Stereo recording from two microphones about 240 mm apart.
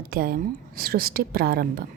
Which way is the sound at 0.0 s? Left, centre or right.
Right.